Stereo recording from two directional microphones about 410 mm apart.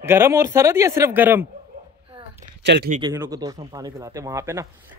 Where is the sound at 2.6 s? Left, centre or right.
Right.